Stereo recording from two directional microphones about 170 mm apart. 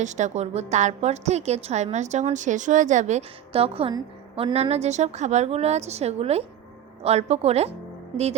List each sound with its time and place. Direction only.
0.0 s a woman's voice: 45° right (ahead or behind); by 4.5 s 25° right (ahead or behind)
4.5 s a woman's voice: 40° right (ahead or behind)